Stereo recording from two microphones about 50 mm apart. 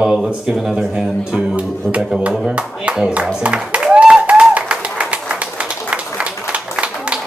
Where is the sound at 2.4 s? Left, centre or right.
Right.